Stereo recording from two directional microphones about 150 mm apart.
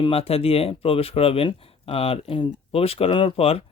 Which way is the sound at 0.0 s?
40° left (ahead or behind).